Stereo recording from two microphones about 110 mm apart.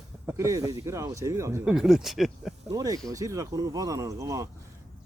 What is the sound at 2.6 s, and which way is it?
Speech, 35° right (ahead or behind).